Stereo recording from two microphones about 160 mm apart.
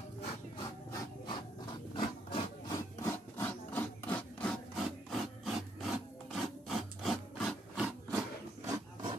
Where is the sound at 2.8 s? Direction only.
15° left (ahead or behind).